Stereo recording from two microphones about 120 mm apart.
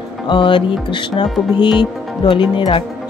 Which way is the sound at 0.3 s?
40° left (ahead or behind).